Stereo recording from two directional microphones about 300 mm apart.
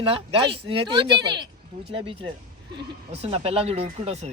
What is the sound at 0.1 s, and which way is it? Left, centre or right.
Speech, centre.